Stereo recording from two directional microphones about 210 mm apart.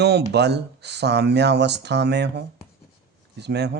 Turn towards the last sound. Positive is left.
turn(degrees=-55)  # may be behind; listen again after turning